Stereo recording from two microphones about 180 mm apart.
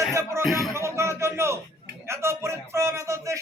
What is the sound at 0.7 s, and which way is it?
Music, 15° right (ahead or behind).